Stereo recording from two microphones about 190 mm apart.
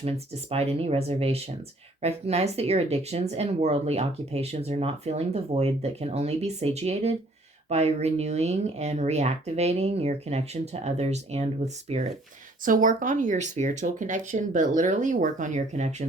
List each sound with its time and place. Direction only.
0.0 s speech: 30° right (ahead or behind)